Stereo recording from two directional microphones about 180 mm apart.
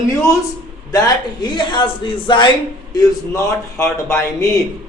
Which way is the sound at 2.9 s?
15° left (ahead or behind).